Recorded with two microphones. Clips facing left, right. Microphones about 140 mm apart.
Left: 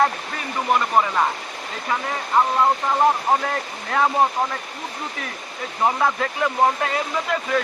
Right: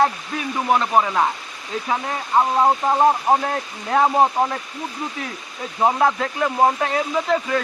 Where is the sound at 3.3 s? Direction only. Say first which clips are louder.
Right 2 dB; 20° right (ahead or behind).